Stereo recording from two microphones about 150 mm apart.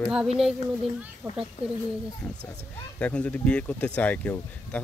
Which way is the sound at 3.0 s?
10° left (ahead or behind).